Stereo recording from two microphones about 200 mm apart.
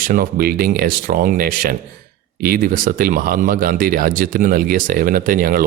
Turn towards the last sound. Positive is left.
turn(degrees=-45)  # may be behind; listen again after turning